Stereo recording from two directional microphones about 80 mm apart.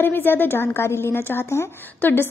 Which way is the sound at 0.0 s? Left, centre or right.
Left.